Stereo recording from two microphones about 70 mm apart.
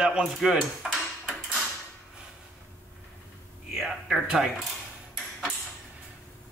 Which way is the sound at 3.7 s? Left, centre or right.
Centre.